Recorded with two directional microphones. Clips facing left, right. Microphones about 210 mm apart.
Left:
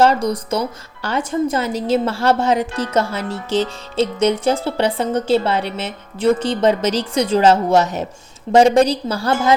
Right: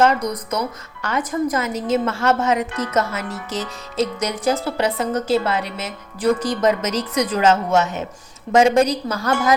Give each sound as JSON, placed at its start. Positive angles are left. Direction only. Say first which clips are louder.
{"t": 0.0, "sound": "a woman's voice", "louder": "left 3 dB", "side_deg": 30}